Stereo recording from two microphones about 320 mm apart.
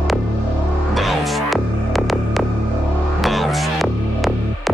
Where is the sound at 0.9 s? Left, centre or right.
Centre.